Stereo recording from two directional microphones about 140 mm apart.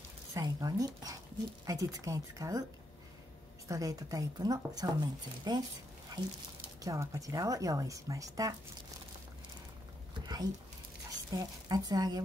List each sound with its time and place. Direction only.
0.3 s speech: 25° right (ahead or behind)
3.6 s speech: 25° right (ahead or behind)
6.8 s speech: 25° right (ahead or behind)
10.2 s a sound: 30° right (ahead or behind)
11.3 s speech: 30° right (ahead or behind)